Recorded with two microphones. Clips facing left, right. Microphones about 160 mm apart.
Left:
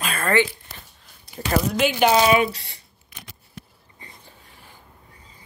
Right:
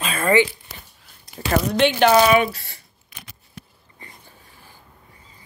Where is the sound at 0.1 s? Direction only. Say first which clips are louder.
Right 3 dB; 10° right (ahead or behind).